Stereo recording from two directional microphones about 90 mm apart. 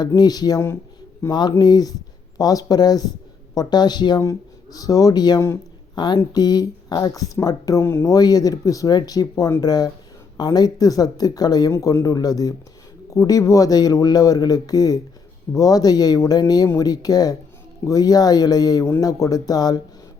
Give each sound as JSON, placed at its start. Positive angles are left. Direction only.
{"t": 0.2, "sound": "speech", "side_deg": 45}
{"t": 4.2, "sound": "speech", "side_deg": 40}
{"t": 7.9, "sound": "speech", "side_deg": 30}
{"t": 8.1, "sound": "speech", "side_deg": 45}
{"t": 11.7, "sound": "speech", "side_deg": 35}